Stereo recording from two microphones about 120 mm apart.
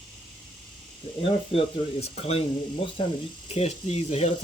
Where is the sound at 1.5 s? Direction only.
55° left (ahead or behind).